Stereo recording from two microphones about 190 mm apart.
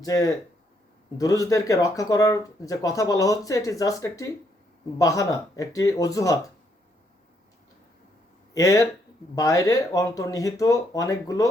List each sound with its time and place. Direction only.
0.0 s speech: 20° left (ahead or behind)
8.5 s speech: 15° left (ahead or behind)